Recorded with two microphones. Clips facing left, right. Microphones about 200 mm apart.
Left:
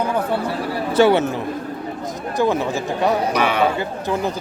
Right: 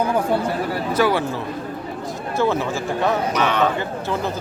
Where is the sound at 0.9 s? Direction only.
25° left (ahead or behind).